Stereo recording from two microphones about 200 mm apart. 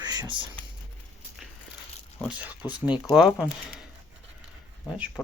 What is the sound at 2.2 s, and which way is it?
Speech, 5° right (ahead or behind).